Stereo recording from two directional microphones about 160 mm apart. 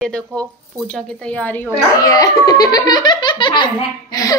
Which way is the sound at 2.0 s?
20° left (ahead or behind).